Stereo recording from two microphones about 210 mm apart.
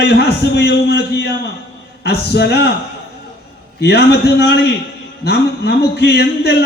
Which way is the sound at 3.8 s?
50° left (ahead or behind).